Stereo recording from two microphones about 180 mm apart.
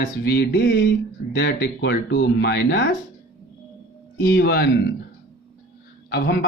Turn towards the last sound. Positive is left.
turn(degrees=65)  # may be behind; listen again after turning